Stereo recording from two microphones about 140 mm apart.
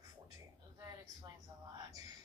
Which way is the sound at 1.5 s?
20° right (ahead or behind).